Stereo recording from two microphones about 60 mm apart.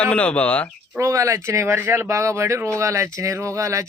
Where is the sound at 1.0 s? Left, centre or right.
Right.